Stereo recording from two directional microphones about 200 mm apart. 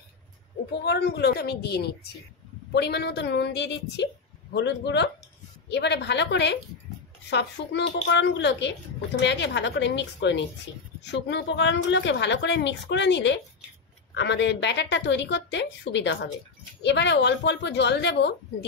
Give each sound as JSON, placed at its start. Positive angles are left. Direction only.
{"t": 0.8, "sound": "a woman's voice", "side_deg": 55}